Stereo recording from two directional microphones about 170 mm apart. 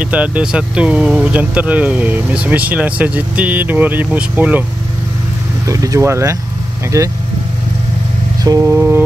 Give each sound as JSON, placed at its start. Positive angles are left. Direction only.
{"t": 0.0, "sound": "speech", "side_deg": -10}
{"t": 5.7, "sound": "speech", "side_deg": -20}
{"t": 8.5, "sound": "speech", "side_deg": -15}